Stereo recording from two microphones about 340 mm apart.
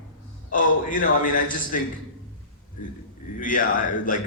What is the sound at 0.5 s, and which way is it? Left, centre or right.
A man's voice, left.